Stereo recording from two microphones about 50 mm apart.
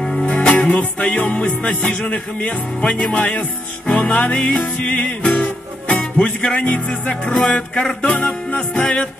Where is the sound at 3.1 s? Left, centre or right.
Left.